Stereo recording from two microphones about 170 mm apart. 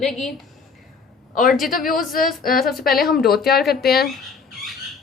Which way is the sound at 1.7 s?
55° left (ahead or behind).